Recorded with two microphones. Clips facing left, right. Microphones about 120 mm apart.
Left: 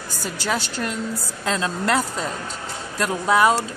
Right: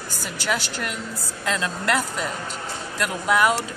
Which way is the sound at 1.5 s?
30° left (ahead or behind).